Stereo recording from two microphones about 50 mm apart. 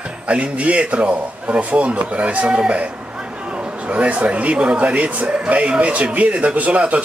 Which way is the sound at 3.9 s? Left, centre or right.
Right.